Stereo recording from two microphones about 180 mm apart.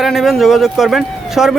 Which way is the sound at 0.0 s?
Centre (ahead or behind).